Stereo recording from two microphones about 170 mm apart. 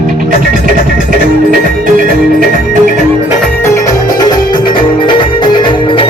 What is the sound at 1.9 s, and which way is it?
Music, 55° right (ahead or behind).